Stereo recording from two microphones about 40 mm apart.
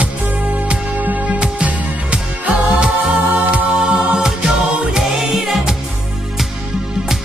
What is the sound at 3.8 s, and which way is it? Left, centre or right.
Music, right.